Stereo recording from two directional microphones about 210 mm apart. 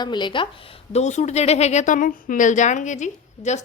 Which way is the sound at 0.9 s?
35° left (ahead or behind).